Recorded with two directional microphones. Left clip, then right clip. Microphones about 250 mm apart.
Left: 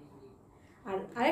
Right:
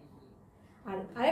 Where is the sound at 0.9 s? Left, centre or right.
Centre.